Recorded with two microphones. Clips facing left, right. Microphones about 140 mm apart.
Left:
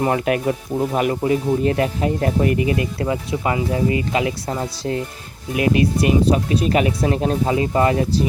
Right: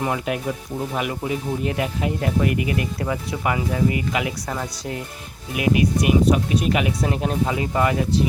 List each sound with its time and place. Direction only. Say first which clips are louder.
0.0 s speech: left 5 dB; 50° left (ahead or behind); by 4.9 s 30° left (ahead or behind)
5.5 s speech: left 2 dB; 15° right (ahead or behind)
6.2 s speech: left 1 dB; 30° left (ahead or behind)